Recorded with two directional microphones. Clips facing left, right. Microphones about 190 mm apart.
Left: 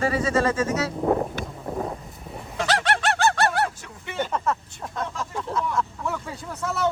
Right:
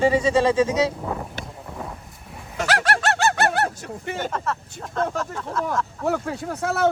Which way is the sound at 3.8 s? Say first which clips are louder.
Right 1 dB; 45° right (ahead or behind).